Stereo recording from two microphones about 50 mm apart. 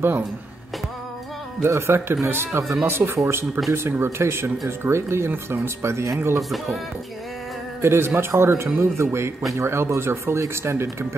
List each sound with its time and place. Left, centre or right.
1.6 s speech: right
3.0 s speech: right
3.3 s speech: right
7.8 s speech: right
8.3 s a man's voice: right